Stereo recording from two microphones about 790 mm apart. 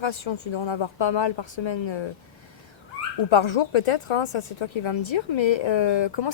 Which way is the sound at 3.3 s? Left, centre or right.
Left.